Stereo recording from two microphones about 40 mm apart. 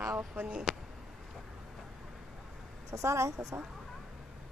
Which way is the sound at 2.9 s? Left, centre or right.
Right.